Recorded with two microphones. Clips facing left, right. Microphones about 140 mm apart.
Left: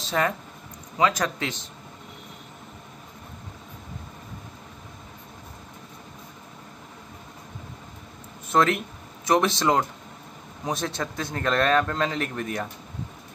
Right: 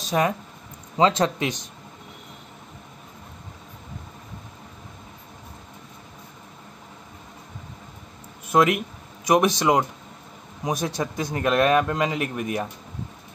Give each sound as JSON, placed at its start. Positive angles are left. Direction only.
{"t": 0.1, "sound": "a man's voice", "side_deg": -15}
{"t": 0.9, "sound": "speech", "side_deg": -25}
{"t": 8.5, "sound": "a man's voice", "side_deg": -10}